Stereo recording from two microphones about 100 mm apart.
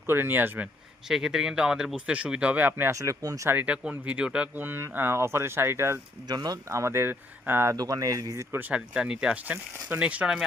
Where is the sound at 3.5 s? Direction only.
15° right (ahead or behind).